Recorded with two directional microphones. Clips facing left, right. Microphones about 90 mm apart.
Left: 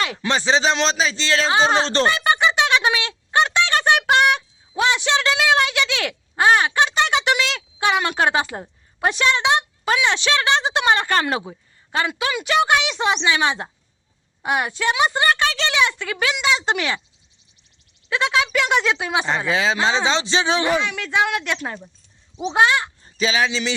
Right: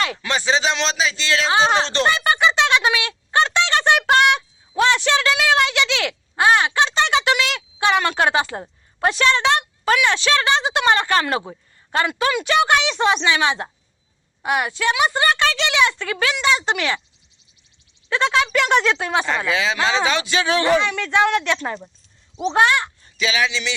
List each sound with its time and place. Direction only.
0.2 s a man's voice: 30° left (ahead or behind)
1.5 s speech: centre (ahead or behind)
1.7 s a man's voice: 35° left (ahead or behind)
2.0 s a sound: 15° left (ahead or behind)
2.8 s fowl: 25° left (ahead or behind)
3.8 s a woman's voice: 15° left (ahead or behind)
8.5 s speech: centre (ahead or behind)
9.0 s a woman's voice: 15° left (ahead or behind)
11.4 s a woman's voice: centre (ahead or behind)
14.4 s a woman's voice: 25° left (ahead or behind)
18.1 s speech: 5° left (ahead or behind)
19.2 s a man's voice: 25° left (ahead or behind)
20.7 s a woman's voice: 5° left (ahead or behind)
23.0 s speech: 35° left (ahead or behind)